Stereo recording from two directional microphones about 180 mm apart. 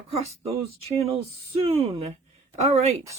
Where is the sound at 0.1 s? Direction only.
35° right (ahead or behind).